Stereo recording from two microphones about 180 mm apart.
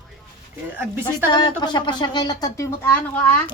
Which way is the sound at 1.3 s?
25° left (ahead or behind).